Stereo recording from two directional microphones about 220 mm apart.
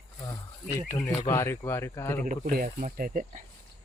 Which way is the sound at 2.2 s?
35° right (ahead or behind).